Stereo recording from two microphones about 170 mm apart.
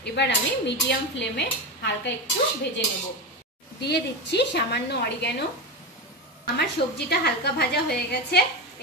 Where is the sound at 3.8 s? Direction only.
80° left.